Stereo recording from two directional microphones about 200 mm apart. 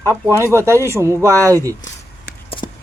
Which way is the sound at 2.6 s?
20° left (ahead or behind).